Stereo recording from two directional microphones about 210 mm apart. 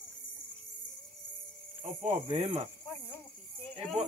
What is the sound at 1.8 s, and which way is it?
Cricket, 30° right (ahead or behind).